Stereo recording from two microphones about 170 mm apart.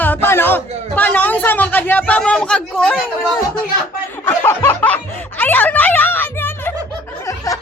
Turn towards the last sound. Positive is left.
turn(degrees=20)  # may be behind; listen again after turning